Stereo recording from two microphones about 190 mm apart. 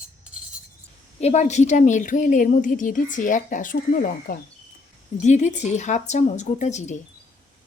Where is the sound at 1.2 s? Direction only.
35° left (ahead or behind).